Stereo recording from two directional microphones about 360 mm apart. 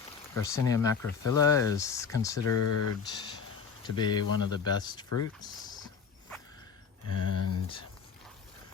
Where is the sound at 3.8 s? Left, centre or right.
Centre.